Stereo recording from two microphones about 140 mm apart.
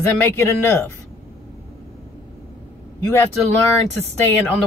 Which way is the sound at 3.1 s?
15° left (ahead or behind).